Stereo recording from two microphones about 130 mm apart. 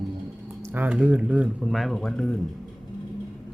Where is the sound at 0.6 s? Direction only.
15° right (ahead or behind); by 2.4 s 5° left (ahead or behind).